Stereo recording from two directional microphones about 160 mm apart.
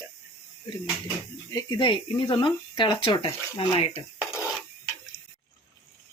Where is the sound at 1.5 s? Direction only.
25° left (ahead or behind).